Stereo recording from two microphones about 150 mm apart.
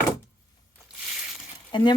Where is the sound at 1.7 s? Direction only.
30° left (ahead or behind).